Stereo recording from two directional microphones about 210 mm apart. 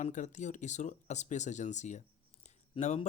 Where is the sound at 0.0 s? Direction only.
35° left (ahead or behind).